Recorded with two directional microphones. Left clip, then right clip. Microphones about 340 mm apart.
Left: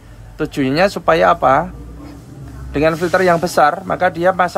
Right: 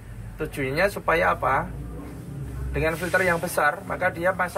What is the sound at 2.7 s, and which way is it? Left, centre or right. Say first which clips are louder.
Speech: left 10 dB; left.